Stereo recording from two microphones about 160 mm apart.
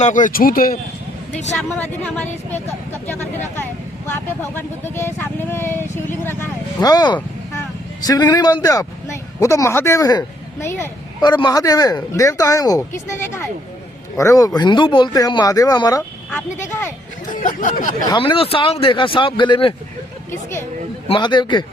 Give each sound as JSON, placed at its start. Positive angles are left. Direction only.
{"t": 0.0, "sound": "speech", "side_deg": 55}
{"t": 1.3, "sound": "speech", "side_deg": 45}
{"t": 2.5, "sound": "speech", "side_deg": 10}
{"t": 11.2, "sound": "speech", "side_deg": 25}
{"t": 17.2, "sound": "speech", "side_deg": 55}
{"t": 18.2, "sound": "speech", "side_deg": 35}
{"t": 20.3, "sound": "speech", "side_deg": 15}
{"t": 21.1, "sound": "speech", "side_deg": 30}